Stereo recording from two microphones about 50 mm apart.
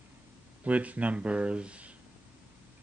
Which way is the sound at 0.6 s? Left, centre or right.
Right.